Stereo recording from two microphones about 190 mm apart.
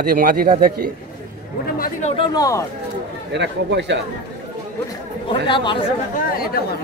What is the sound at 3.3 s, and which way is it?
Speech, 65° right (ahead or behind).